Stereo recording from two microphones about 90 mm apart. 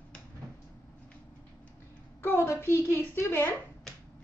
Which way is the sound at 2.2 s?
25° left (ahead or behind).